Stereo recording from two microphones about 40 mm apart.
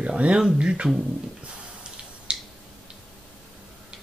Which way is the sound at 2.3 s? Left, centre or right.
Right.